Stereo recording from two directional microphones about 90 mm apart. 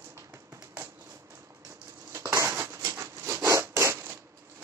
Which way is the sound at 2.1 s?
35° right (ahead or behind).